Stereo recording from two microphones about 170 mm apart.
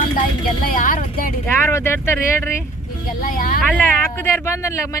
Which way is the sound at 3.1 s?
55° left (ahead or behind).